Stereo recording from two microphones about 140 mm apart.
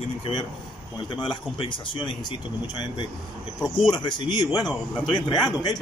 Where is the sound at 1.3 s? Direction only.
35° left (ahead or behind).